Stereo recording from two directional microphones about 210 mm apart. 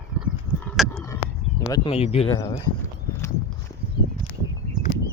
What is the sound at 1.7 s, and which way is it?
Speech, 25° left (ahead or behind).